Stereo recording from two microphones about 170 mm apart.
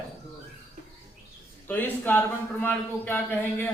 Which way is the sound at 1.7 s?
10° left (ahead or behind).